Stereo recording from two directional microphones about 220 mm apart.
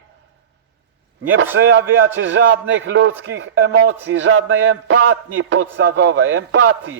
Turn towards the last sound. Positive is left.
turn(degrees=-60)  # may be behind; listen again after turning